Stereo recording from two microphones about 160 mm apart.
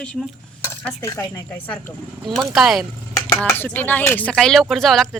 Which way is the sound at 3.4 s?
15° left (ahead or behind).